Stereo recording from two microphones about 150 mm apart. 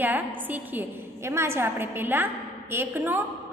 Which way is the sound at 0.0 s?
10° right (ahead or behind).